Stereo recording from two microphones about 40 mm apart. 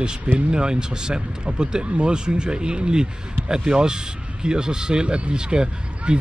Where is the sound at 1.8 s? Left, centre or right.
Right.